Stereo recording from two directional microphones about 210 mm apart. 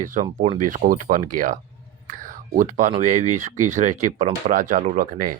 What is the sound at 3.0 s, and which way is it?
Speech, 35° right (ahead or behind).